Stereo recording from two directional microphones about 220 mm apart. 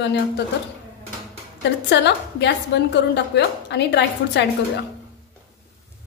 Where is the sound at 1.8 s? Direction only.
50° left (ahead or behind).